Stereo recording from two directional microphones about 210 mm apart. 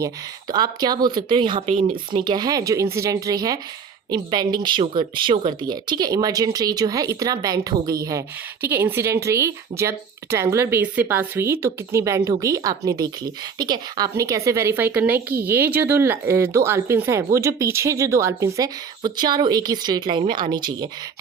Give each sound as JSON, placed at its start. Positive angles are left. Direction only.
{"t": 0.5, "sound": "speech", "side_deg": -20}